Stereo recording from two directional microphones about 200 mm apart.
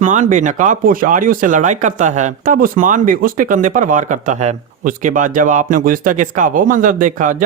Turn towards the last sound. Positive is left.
turn(degrees=-40)  # may be behind; listen again after turning